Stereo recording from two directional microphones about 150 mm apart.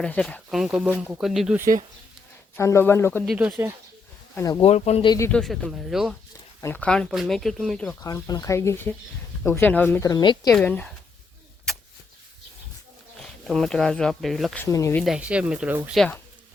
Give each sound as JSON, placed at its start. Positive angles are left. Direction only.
{"t": 0.0, "sound": "speech", "side_deg": 5}
{"t": 2.6, "sound": "speech", "side_deg": 20}
{"t": 3.3, "sound": "speech", "side_deg": -10}
{"t": 4.4, "sound": "speech", "side_deg": 25}
{"t": 4.6, "sound": "speech", "side_deg": 45}
{"t": 5.0, "sound": "speech", "side_deg": 25}
{"t": 5.3, "sound": "speech", "side_deg": 0}
{"t": 6.6, "sound": "speech", "side_deg": 10}
{"t": 8.0, "sound": "speech", "side_deg": 25}
{"t": 10.0, "sound": "speech", "side_deg": 25}
{"t": 10.5, "sound": "speech", "side_deg": 10}
{"t": 13.1, "sound": "speech", "side_deg": 0}
{"t": 14.6, "sound": "speech", "side_deg": 20}
{"t": 15.0, "sound": "speech", "side_deg": -5}